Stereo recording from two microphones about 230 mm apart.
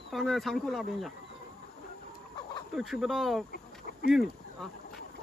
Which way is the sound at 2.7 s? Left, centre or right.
Centre.